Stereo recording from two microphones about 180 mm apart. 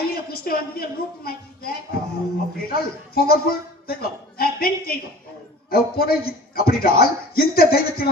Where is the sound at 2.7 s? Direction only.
55° left (ahead or behind).